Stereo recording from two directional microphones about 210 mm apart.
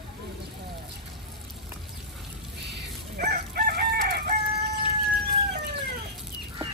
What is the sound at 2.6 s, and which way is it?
Crowing, 50° right (ahead or behind).